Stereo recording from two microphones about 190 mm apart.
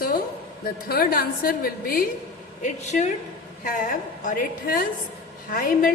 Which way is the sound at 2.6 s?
40° left (ahead or behind).